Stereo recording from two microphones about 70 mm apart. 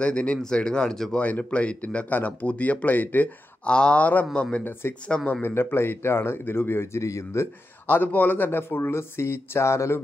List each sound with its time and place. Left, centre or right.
0.0 s speech: centre
3.6 s speech: centre
5.4 s speech: left
7.8 s speech: left